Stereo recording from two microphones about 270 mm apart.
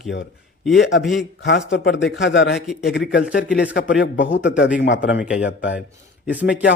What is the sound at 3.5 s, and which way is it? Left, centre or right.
Speech, centre.